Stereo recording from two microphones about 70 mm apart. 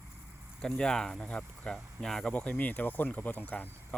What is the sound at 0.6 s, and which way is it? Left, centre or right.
Speech, centre.